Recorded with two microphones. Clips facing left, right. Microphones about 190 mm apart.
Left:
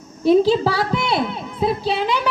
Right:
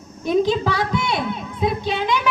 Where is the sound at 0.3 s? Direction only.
30° left (ahead or behind).